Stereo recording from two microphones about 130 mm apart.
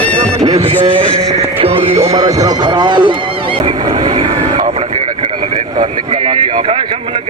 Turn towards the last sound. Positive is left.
turn(degrees=-45)  # may be behind; listen again after turning